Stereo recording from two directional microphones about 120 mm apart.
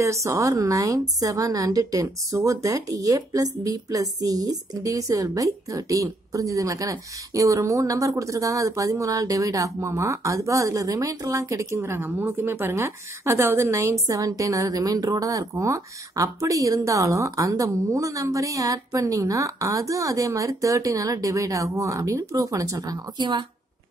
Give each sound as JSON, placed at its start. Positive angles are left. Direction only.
{"t": 0.0, "sound": "a woman's voice", "side_deg": -25}